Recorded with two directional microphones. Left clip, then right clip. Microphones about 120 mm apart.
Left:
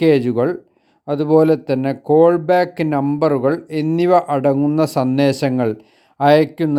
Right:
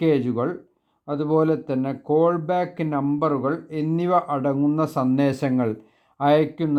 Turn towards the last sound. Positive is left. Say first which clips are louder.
# left 6 dB
turn(degrees=30)  # may be behind; listen again after turning